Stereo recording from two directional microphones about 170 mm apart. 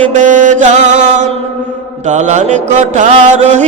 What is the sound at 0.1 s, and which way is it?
Mantra, 45° right (ahead or behind).